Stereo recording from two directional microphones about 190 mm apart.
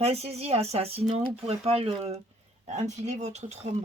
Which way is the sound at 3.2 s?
35° right (ahead or behind).